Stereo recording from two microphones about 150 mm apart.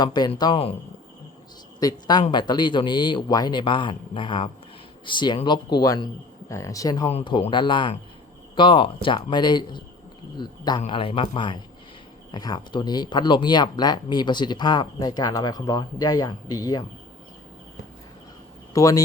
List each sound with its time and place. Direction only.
0.0 s speech: 25° left (ahead or behind)
1.8 s speech: 25° left (ahead or behind)
7.1 s speech: 40° left (ahead or behind)
18.7 s speech: 20° left (ahead or behind)